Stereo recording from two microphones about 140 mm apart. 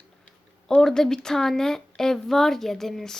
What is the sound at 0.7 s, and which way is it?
Speech, 5° left (ahead or behind).